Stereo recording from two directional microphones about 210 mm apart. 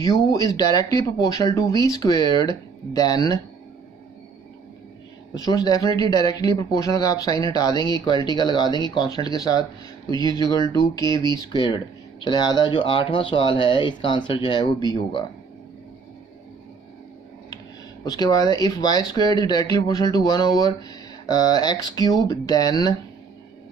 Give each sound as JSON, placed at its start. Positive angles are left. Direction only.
{"t": 0.0, "sound": "speech", "side_deg": 15}
{"t": 5.3, "sound": "speech", "side_deg": 20}
{"t": 18.0, "sound": "speech", "side_deg": 20}